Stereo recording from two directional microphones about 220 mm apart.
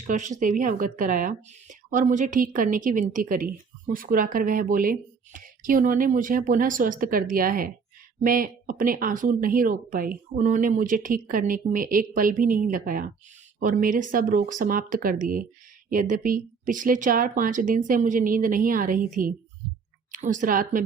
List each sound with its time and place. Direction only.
0.1 s speech: 35° right (ahead or behind)